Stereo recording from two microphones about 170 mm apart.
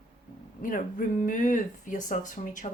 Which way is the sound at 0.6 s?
55° left (ahead or behind).